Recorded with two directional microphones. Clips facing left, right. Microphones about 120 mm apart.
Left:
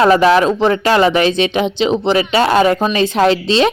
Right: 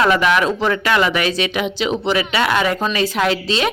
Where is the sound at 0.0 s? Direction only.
35° left (ahead or behind).